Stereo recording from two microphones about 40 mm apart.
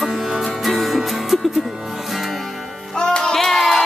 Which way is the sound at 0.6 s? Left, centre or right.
Centre.